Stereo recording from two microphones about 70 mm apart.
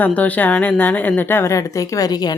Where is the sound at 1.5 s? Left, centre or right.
Left.